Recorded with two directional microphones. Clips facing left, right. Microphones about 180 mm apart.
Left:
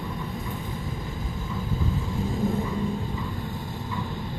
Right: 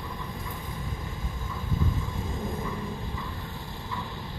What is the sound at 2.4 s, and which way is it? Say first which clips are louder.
Vehicle: left 8 dB; 30° left (ahead or behind).